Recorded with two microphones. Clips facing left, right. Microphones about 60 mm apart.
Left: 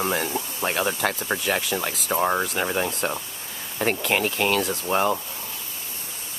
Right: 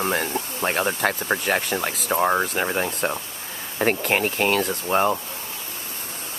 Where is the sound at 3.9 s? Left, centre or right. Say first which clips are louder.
Right 1 dB; right.